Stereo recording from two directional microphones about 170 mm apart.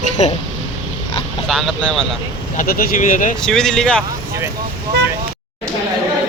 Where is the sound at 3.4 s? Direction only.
5° left (ahead or behind).